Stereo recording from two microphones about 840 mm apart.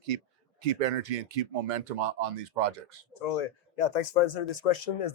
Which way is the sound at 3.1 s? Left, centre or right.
Left.